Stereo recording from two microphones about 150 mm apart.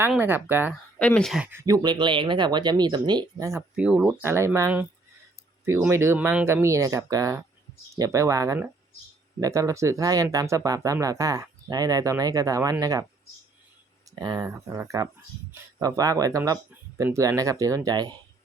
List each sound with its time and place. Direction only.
0.2 s speech: 15° right (ahead or behind)
0.9 s speech: 10° left (ahead or behind)
1.5 s speech: 20° right (ahead or behind)
3.8 s speech: 5° right (ahead or behind)
4.2 s speech: 15° right (ahead or behind)
5.9 s speech: 15° right (ahead or behind)
14.2 s speech: 25° right (ahead or behind)